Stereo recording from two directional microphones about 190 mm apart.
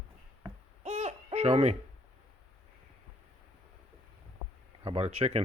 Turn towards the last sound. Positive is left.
turn(degrees=-35)  # may be behind; listen again after turning